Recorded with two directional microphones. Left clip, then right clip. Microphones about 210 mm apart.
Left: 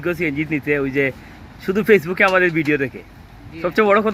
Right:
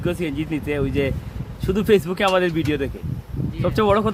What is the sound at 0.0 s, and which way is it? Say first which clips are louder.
Speech: left 4 dB; 5° left (ahead or behind).